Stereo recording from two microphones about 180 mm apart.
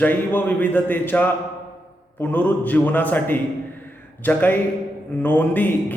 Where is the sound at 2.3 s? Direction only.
10° left (ahead or behind).